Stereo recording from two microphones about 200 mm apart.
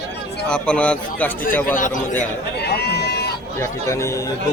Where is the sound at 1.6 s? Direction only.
40° left (ahead or behind).